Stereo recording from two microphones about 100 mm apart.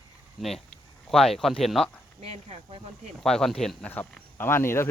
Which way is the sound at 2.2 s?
90° right.